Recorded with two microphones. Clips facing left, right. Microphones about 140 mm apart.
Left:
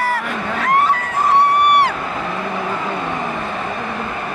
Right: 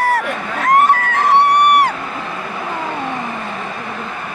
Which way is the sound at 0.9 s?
75° right (ahead or behind).